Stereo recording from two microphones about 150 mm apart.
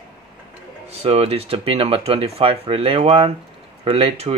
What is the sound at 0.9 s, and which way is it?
Speech, 45° right (ahead or behind).